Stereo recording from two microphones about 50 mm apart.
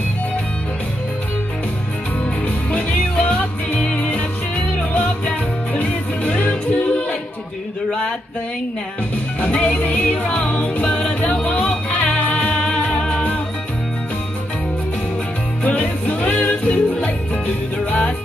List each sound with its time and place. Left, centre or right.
2.4 s music: left
9.4 s music: left
12.5 s music: centre
15.7 s music: left